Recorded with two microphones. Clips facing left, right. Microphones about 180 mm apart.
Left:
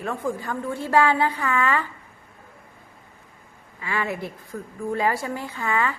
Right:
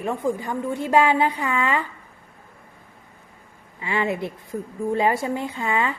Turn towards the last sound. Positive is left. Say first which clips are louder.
# right 1 dB
turn(degrees=-20)  # may be behind; listen again after turning